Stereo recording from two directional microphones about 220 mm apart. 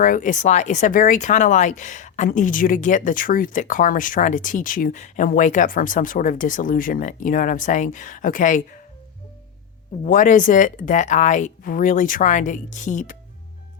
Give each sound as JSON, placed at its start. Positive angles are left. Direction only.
{"t": 0.0, "sound": "speech", "side_deg": 35}
{"t": 10.0, "sound": "speech", "side_deg": 35}